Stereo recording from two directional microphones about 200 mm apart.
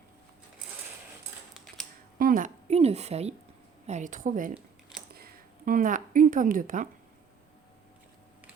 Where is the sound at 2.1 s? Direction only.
45° right (ahead or behind).